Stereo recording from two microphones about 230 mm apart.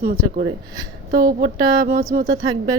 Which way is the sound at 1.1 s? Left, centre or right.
Right.